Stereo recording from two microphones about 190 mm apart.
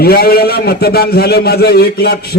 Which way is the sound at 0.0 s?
55° left (ahead or behind).